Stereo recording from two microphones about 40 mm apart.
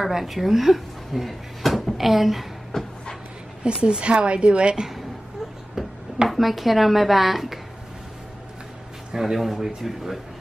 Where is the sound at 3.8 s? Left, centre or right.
Right.